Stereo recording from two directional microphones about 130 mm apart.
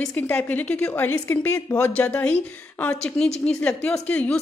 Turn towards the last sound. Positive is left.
turn(degrees=10)  # may be behind; listen again after turning